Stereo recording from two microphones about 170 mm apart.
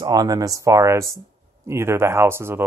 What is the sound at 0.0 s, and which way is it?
Speech, 25° right (ahead or behind).